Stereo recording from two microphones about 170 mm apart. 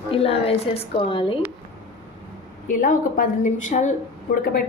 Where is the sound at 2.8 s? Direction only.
55° left (ahead or behind).